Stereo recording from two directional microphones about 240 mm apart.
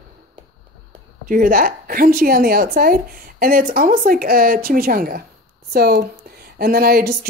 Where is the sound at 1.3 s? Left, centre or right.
Right.